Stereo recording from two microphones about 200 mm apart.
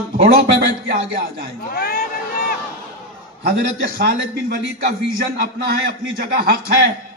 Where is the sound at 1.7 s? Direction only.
45° left (ahead or behind).